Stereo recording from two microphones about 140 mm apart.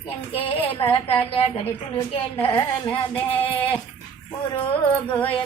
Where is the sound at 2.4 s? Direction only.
35° left (ahead or behind).